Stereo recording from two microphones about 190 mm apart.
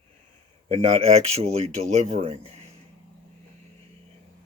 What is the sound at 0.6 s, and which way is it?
Speech, 30° right (ahead or behind).